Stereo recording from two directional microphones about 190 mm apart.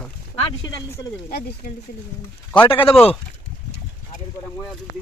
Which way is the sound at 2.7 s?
30° left (ahead or behind).